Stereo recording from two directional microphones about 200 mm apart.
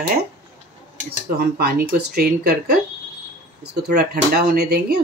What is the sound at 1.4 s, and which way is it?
Speech, 50° right (ahead or behind).